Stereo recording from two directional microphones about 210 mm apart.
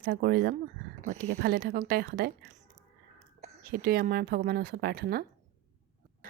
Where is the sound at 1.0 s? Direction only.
35° right (ahead or behind).